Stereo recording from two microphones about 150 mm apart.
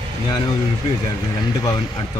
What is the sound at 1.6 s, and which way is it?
Speech, 30° left (ahead or behind).